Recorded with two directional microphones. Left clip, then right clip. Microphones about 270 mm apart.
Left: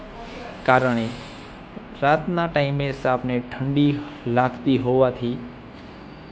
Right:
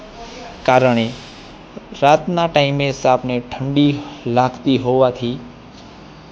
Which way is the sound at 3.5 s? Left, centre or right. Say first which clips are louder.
Right 6 dB; centre.